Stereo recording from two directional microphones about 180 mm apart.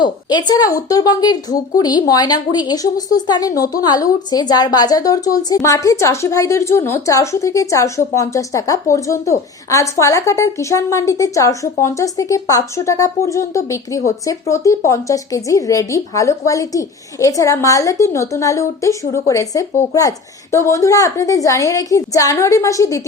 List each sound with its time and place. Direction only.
0.0 s a woman's voice: 25° left (ahead or behind)